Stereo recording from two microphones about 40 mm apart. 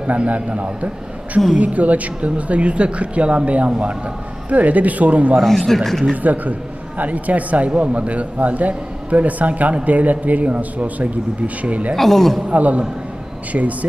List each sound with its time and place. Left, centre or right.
0.0 s speech: right
5.9 s speech: centre
6.2 s a man's voice: right
11.9 s speech: centre
12.4 s speech: right